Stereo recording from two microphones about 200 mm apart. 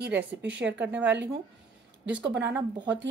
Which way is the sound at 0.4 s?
60° right (ahead or behind).